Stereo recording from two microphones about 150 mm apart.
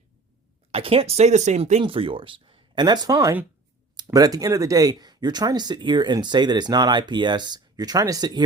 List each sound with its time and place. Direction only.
0.7 s speech: 40° right (ahead or behind)
1.8 s speech: 35° right (ahead or behind)